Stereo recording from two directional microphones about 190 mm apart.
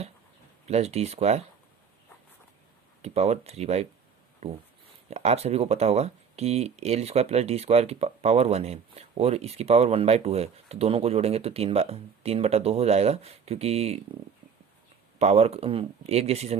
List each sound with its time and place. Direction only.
0.6 s speech: 35° right (ahead or behind)
3.0 s speech: 35° right (ahead or behind)
15.2 s speech: 35° right (ahead or behind)